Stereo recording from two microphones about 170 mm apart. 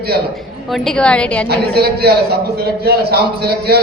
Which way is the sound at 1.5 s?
70° right (ahead or behind).